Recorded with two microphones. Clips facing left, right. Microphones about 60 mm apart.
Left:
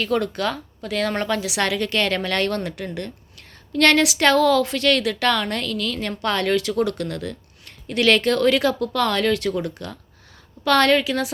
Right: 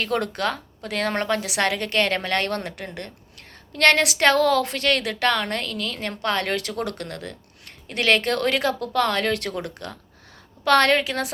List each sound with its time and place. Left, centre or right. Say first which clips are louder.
0.0 s a woman's voice: left 2 dB; right
9.4 s a woman's voice: left 5 dB; right